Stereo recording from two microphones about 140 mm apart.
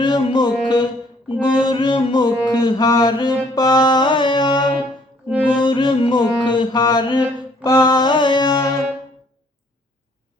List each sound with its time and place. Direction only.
0.0 s music: 35° left (ahead or behind)
5.3 s music: 10° right (ahead or behind)
5.5 s music: 35° left (ahead or behind)